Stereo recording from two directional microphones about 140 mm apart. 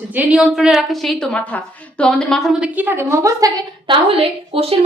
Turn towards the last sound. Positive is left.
turn(degrees=-45)  # may be behind; listen again after turning